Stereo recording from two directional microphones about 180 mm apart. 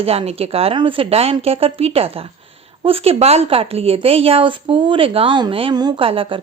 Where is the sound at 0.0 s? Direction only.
35° right (ahead or behind).